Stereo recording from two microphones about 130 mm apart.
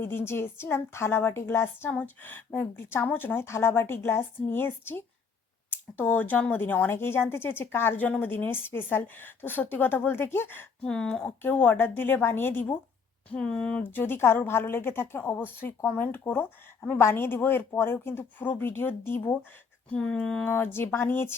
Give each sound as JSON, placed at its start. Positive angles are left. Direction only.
{"t": 0.0, "sound": "speech", "side_deg": 15}
{"t": 10.8, "sound": "speech", "side_deg": 5}